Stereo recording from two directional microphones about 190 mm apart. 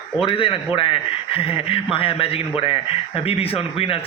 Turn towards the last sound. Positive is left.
turn(degrees=30)  # may be behind; listen again after turning